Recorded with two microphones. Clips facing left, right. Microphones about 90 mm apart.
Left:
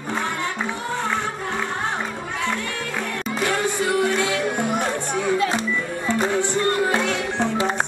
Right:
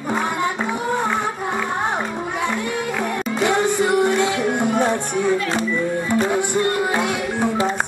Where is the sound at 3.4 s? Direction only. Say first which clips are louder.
Right 5 dB; 20° right (ahead or behind).